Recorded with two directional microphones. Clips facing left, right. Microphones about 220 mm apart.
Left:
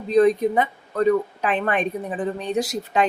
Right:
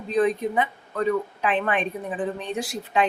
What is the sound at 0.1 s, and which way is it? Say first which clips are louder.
Speech: left 5 dB; 40° left (ahead or behind).